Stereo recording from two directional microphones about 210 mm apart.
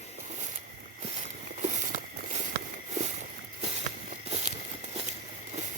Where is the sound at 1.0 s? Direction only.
30° right (ahead or behind).